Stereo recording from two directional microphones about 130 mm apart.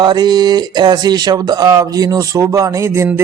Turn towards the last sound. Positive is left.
turn(degrees=-20)  # may be behind; listen again after turning